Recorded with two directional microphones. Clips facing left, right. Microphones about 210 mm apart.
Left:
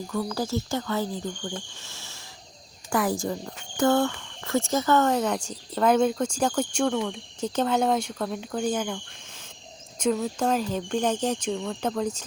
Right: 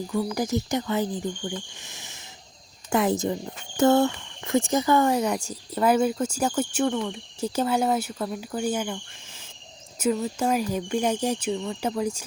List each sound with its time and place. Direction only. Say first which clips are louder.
0.1 s speech: right 2 dB; 15° right (ahead or behind)